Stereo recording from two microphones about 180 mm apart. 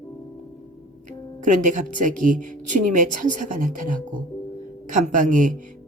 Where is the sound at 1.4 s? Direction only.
45° right (ahead or behind).